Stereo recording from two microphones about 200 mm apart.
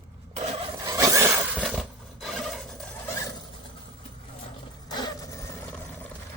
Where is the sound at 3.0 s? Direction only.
15° left (ahead or behind).